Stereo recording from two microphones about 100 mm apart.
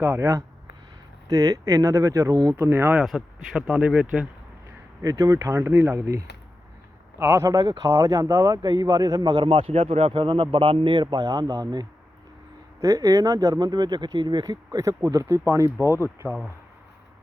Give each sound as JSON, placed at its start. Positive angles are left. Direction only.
{"t": 0.0, "sound": "speech", "side_deg": -25}
{"t": 3.0, "sound": "speech", "side_deg": -5}
{"t": 5.0, "sound": "speech", "side_deg": -35}
{"t": 7.2, "sound": "speech", "side_deg": -25}